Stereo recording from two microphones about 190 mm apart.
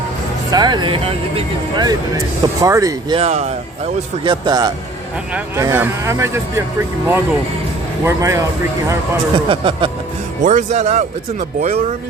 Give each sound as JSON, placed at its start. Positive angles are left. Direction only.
{"t": 0.5, "sound": "speech", "side_deg": -20}
{"t": 3.2, "sound": "speech", "side_deg": -35}
{"t": 8.0, "sound": "speech", "side_deg": -15}
{"t": 9.3, "sound": "speech", "side_deg": -25}
{"t": 10.4, "sound": "speech", "side_deg": -40}